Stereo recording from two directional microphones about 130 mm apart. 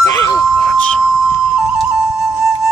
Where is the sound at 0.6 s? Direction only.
5° left (ahead or behind).